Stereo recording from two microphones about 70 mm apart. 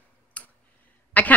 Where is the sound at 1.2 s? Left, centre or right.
Left.